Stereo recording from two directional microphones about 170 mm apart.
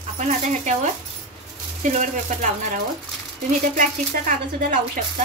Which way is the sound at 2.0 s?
50° right (ahead or behind).